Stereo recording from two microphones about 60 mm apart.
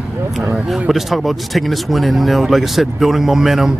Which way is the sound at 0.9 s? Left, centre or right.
Centre.